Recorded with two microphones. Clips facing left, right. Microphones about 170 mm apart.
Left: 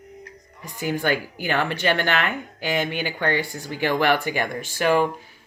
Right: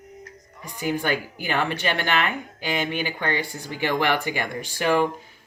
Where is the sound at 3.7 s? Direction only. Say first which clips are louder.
Left 2 dB; 15° right (ahead or behind).